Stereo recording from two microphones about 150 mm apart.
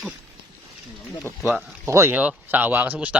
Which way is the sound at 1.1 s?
20° left (ahead or behind).